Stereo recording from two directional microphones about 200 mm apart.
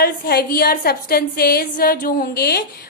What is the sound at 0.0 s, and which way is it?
A woman's voice, 50° left (ahead or behind).